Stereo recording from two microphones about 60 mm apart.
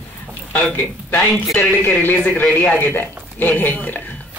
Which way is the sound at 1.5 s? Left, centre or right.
Left.